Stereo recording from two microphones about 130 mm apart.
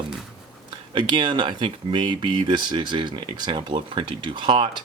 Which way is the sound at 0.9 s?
40° right (ahead or behind).